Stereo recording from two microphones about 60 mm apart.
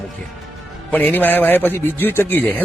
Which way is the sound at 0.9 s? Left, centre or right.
Left.